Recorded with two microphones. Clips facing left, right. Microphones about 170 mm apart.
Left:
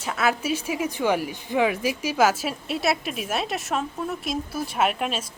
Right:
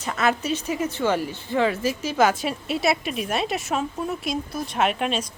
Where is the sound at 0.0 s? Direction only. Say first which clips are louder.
Right 1 dB; 5° left (ahead or behind).